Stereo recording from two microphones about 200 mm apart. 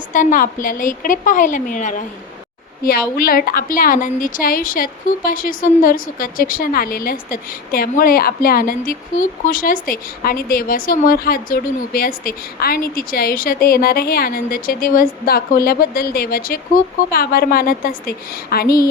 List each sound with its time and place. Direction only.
0.1 s a woman's voice: 40° left (ahead or behind)